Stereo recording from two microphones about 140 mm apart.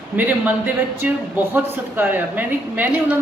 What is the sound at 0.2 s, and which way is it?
Speech, 10° right (ahead or behind).